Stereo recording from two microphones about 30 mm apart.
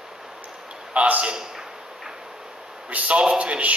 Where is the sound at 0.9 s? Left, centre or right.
Right.